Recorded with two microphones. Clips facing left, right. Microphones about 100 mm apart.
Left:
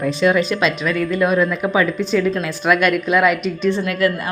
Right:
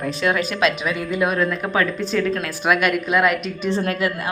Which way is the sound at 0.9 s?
15° right (ahead or behind).